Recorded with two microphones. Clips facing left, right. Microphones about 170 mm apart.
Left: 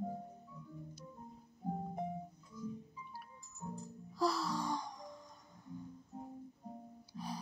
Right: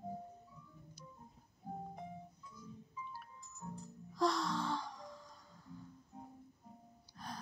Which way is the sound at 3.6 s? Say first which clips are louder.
Left 3 dB; 20° left (ahead or behind).